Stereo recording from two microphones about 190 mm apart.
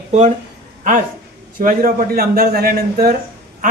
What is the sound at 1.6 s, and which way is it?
A man's voice, 50° right (ahead or behind).